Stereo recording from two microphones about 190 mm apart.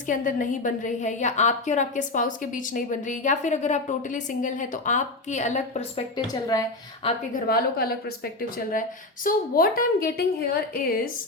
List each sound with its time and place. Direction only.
0.1 s a woman's voice: 45° left (ahead or behind)
6.1 s a woman's voice: 20° left (ahead or behind)
7.3 s a woman's voice: 50° left (ahead or behind)